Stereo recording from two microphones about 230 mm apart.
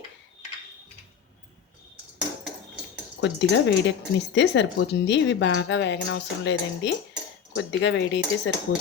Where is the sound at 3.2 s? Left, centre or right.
Left.